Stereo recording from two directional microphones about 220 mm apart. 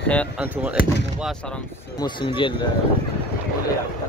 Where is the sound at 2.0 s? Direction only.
20° left (ahead or behind).